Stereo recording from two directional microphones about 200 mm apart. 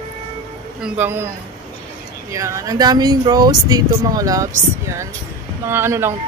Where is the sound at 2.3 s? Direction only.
15° right (ahead or behind).